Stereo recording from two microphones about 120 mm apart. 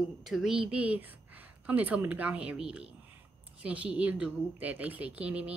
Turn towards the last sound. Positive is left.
turn(degrees=-10)  # may be behind; listen again after turning